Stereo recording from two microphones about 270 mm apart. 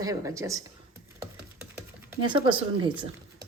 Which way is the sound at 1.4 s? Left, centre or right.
Centre.